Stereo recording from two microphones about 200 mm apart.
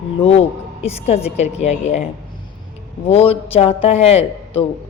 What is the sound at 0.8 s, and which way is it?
A woman's voice, 30° left (ahead or behind).